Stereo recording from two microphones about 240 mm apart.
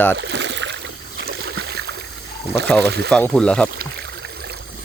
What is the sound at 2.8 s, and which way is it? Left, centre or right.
Speech, right.